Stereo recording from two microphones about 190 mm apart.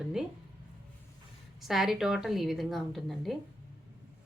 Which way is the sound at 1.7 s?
Centre (ahead or behind).